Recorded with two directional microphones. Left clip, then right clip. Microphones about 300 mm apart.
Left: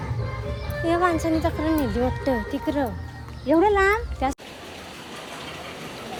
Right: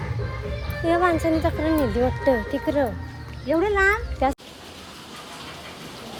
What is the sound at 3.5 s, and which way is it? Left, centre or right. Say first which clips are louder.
Speech: left 1 dB; left.